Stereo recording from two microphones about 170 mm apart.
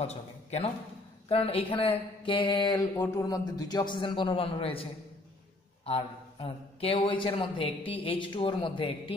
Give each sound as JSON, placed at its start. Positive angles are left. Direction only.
{"t": 0.0, "sound": "a man's voice", "side_deg": 40}
{"t": 5.9, "sound": "a man's voice", "side_deg": 35}